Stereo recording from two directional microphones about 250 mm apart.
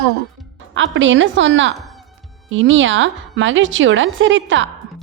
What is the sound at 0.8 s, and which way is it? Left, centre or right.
Speech, right.